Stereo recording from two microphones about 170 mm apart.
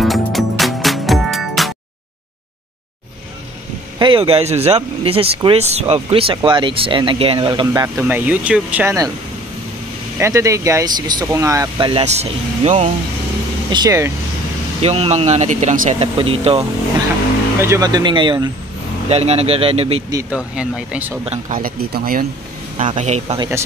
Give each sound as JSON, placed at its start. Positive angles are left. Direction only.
{"t": 0.0, "sound": "music", "side_deg": 0}
{"t": 4.0, "sound": "speech", "side_deg": -30}
{"t": 7.6, "sound": "speech", "side_deg": -20}
{"t": 10.1, "sound": "speech", "side_deg": -15}
{"t": 11.9, "sound": "speech", "side_deg": -40}
{"t": 13.7, "sound": "speech", "side_deg": -20}
{"t": 14.8, "sound": "speech", "side_deg": -35}
{"t": 17.6, "sound": "speech", "side_deg": -15}
{"t": 19.0, "sound": "speech", "side_deg": -40}
{"t": 20.2, "sound": "speech", "side_deg": -5}
{"t": 21.3, "sound": "speech", "side_deg": -55}
{"t": 22.9, "sound": "speech", "side_deg": -40}